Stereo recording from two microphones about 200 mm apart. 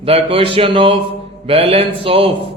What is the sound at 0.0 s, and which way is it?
Speech, 30° right (ahead or behind).